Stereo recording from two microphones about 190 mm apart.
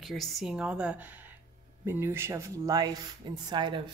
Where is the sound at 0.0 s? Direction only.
Centre (ahead or behind).